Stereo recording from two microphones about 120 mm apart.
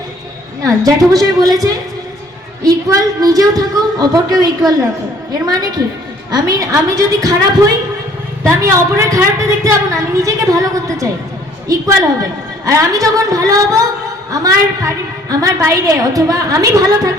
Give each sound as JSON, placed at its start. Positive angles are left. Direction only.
{"t": 0.6, "sound": "a woman's voice", "side_deg": -30}
{"t": 12.6, "sound": "a woman's voice", "side_deg": -30}